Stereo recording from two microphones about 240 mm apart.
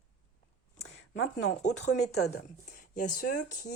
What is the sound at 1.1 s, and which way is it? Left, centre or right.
Speech, left.